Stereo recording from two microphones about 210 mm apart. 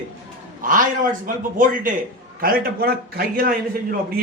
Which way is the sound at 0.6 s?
40° right (ahead or behind).